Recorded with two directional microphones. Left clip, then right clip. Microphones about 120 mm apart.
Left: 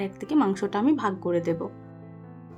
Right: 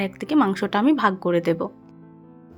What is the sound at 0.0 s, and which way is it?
Speech, 25° right (ahead or behind).